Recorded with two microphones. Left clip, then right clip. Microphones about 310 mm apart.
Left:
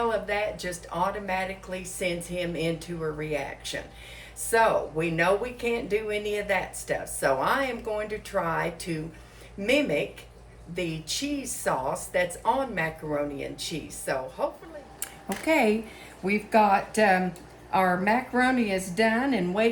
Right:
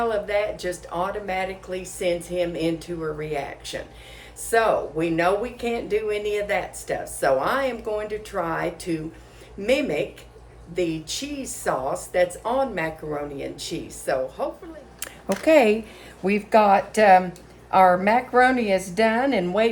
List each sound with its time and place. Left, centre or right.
0.0 s speech: centre
11.6 s speech: centre
15.0 s a sound: right
16.2 s a woman's voice: right